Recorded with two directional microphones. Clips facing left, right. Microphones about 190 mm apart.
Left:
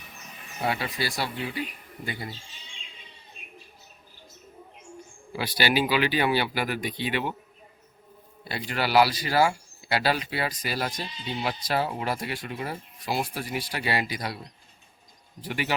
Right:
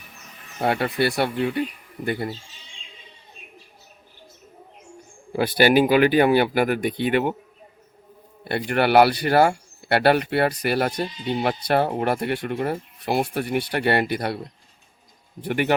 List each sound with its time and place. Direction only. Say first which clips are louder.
0.6 s speech: right 7 dB; 55° right (ahead or behind)
5.3 s speech: right 9 dB; 50° right (ahead or behind)
8.4 s speech: right 8 dB; 60° right (ahead or behind)